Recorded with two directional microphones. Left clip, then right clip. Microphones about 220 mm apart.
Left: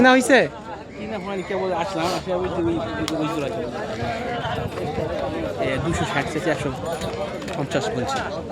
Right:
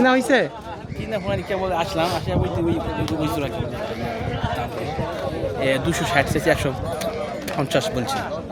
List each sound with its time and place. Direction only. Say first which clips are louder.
0.0 s speech: left 2 dB; 10° left (ahead or behind)
1.3 s speech: even; 45° right (ahead or behind)
5.6 s speech: right 5 dB; 45° right (ahead or behind)
7.7 s speech: right 2 dB; 35° right (ahead or behind)